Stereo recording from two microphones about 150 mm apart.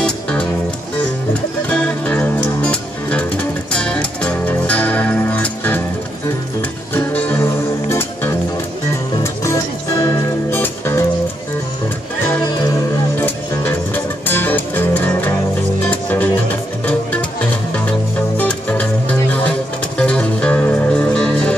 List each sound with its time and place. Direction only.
0.0 s music: 5° left (ahead or behind)
1.7 s music: 5° left (ahead or behind)
6.9 s music: 15° left (ahead or behind)
12.4 s music: 30° left (ahead or behind)
13.2 s music: 10° left (ahead or behind)
17.4 s music: 10° left (ahead or behind)